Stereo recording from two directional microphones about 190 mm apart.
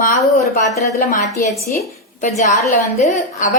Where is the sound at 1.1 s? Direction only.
40° left (ahead or behind).